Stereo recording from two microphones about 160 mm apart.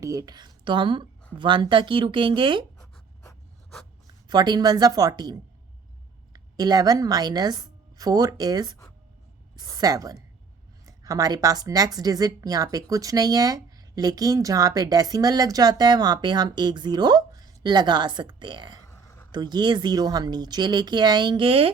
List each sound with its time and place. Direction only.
0.0 s speech: 20° right (ahead or behind)
4.0 s a woman's voice: 25° right (ahead or behind)
18.9 s a sound: 15° left (ahead or behind)
19.3 s speech: 25° right (ahead or behind)